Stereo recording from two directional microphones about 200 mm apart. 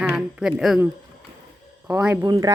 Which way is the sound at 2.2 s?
20° right (ahead or behind).